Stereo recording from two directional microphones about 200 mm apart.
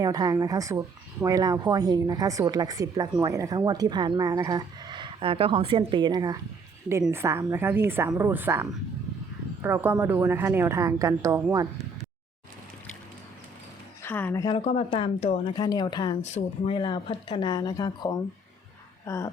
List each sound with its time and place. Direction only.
0.0 s a woman's voice: 20° right (ahead or behind)
14.0 s speech: 10° left (ahead or behind)
14.4 s a woman's voice: 30° left (ahead or behind)